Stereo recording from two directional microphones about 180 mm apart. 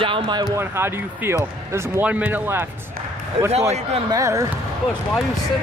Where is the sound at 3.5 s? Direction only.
35° right (ahead or behind).